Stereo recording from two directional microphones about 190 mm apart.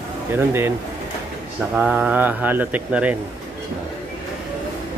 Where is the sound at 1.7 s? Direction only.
5° right (ahead or behind).